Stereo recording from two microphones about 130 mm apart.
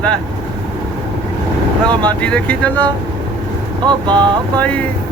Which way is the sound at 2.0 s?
10° left (ahead or behind).